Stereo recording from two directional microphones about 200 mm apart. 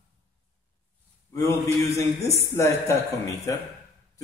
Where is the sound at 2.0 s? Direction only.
15° left (ahead or behind).